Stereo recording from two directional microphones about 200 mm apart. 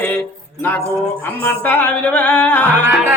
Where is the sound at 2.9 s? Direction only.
10° right (ahead or behind).